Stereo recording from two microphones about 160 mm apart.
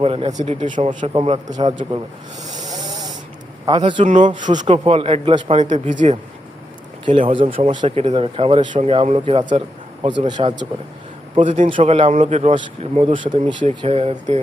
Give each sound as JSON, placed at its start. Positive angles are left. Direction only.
{"t": 0.0, "sound": "speech", "side_deg": -35}
{"t": 0.3, "sound": "a man's voice", "side_deg": -50}
{"t": 2.6, "sound": "spray", "side_deg": -25}
{"t": 3.7, "sound": "a man's voice", "side_deg": -30}
{"t": 4.0, "sound": "speech", "side_deg": -55}
{"t": 5.5, "sound": "speech", "side_deg": -45}
{"t": 7.0, "sound": "speech", "side_deg": -35}